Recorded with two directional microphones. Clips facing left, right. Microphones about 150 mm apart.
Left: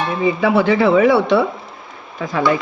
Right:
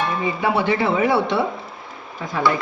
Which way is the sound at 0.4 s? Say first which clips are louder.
Left 5 dB; 90° left.